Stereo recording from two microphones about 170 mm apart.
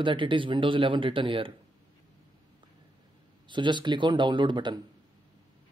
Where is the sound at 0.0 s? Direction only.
30° right (ahead or behind).